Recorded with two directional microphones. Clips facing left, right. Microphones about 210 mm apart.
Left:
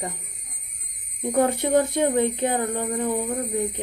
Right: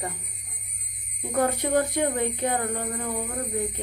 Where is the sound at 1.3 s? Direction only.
25° left (ahead or behind).